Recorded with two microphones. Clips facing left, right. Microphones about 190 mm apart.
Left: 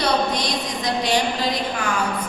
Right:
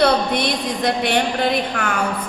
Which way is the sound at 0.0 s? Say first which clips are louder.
Right 4 dB; 60° right (ahead or behind).